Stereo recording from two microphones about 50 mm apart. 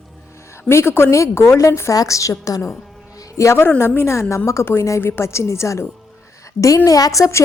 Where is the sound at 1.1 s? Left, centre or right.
Left.